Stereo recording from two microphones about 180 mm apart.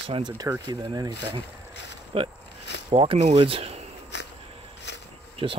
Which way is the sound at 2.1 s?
30° right (ahead or behind).